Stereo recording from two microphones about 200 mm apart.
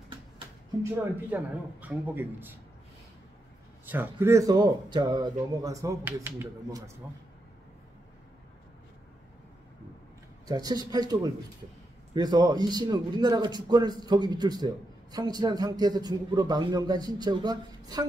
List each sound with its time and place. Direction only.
1.1 s speech: 10° right (ahead or behind)
3.8 s speech: 10° right (ahead or behind)
10.4 s a man's voice: 20° right (ahead or behind)